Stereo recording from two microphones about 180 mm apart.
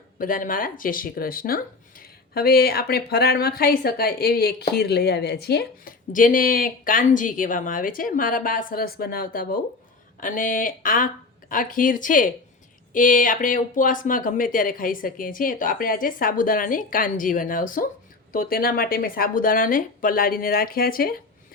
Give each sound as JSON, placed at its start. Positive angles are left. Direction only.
{"t": 0.2, "sound": "speech", "side_deg": 50}